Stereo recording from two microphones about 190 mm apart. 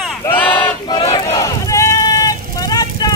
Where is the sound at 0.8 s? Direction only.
25° left (ahead or behind).